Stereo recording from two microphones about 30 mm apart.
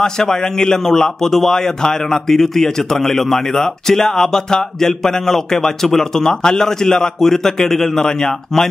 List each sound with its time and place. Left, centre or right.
0.0 s a man's voice: left